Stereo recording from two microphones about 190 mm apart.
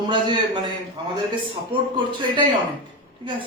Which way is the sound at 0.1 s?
25° right (ahead or behind).